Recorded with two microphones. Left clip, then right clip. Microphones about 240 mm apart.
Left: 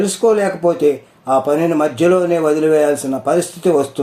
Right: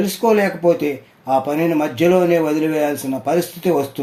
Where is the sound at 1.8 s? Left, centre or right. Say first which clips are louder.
Left 2 dB; right.